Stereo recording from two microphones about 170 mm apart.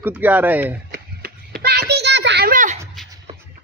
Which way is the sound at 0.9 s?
65° right (ahead or behind).